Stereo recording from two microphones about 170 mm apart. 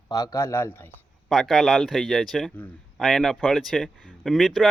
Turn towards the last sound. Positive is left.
turn(degrees=0)  # may be behind; listen again after turning